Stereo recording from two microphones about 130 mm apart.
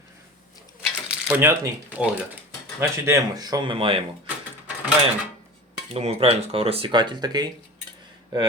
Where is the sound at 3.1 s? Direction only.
30° right (ahead or behind).